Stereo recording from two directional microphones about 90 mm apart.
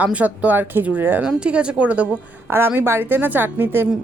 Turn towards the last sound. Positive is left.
turn(degrees=-25)  # may be behind; listen again after turning